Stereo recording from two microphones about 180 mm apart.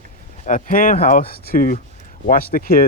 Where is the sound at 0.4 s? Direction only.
50° left (ahead or behind).